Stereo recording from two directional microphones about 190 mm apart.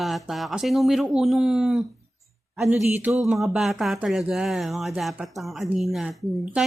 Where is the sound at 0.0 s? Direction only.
Centre (ahead or behind).